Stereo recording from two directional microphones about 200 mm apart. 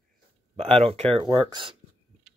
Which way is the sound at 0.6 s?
30° right (ahead or behind).